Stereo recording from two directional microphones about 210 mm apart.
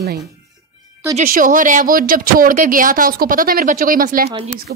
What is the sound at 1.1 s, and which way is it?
Speech, 40° right (ahead or behind).